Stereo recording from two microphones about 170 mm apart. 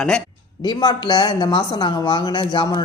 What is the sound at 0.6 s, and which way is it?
Speech, 25° left (ahead or behind).